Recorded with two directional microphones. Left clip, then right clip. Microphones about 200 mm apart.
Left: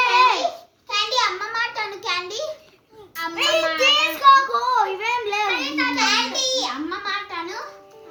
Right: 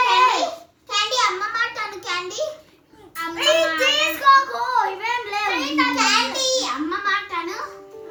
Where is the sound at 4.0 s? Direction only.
15° left (ahead or behind).